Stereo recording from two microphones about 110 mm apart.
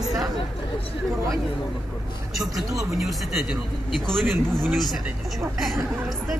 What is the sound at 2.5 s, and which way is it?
Speech, centre (ahead or behind).